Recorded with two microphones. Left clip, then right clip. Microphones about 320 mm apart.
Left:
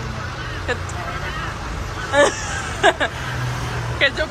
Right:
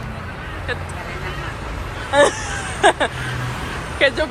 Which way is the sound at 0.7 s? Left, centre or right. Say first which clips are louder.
Left 2 dB; centre.